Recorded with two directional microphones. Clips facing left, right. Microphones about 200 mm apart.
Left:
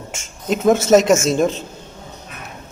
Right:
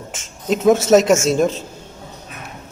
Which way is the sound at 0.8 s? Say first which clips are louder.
Even; 5° right (ahead or behind).